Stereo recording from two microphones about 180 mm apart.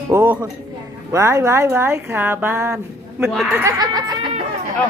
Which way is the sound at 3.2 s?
Centre (ahead or behind).